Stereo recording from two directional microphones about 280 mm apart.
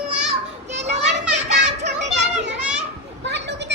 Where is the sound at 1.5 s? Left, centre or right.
Right.